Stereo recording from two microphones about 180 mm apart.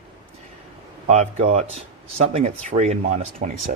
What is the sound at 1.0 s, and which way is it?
Speech, 40° right (ahead or behind).